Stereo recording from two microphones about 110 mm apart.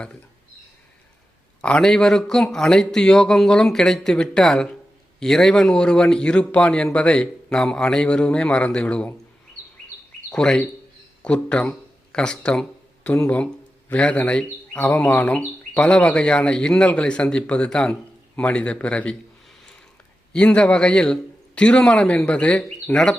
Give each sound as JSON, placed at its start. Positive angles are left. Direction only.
{"t": 1.6, "sound": "speech", "side_deg": 10}
{"t": 10.3, "sound": "speech", "side_deg": 5}
{"t": 20.3, "sound": "speech", "side_deg": 10}